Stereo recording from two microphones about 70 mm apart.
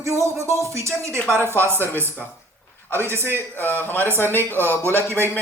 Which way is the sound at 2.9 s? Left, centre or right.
Left.